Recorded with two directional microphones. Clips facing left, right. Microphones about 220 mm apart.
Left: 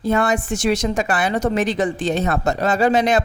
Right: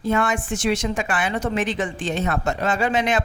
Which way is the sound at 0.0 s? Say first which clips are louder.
Left 3 dB; 35° left (ahead or behind).